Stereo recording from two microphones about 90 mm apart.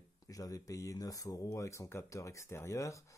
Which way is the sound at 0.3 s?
40° left (ahead or behind).